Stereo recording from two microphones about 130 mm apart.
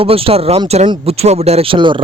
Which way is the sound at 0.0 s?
45° right (ahead or behind).